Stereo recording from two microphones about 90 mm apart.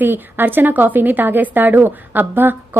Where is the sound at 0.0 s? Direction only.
20° right (ahead or behind).